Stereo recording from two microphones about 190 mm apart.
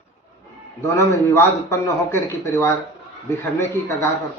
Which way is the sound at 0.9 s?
15° left (ahead or behind).